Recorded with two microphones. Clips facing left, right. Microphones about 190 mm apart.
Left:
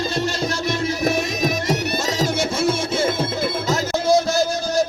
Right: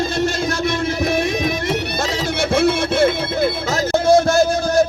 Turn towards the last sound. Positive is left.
turn(degrees=-55)  # may be behind; listen again after turning